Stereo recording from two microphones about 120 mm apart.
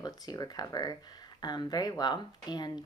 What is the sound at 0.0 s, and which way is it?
Speech, 35° left (ahead or behind).